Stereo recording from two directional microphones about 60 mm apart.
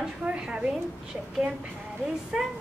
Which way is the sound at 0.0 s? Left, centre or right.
Centre.